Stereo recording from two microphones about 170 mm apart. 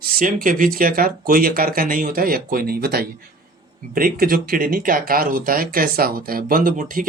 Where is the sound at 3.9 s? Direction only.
55° right (ahead or behind).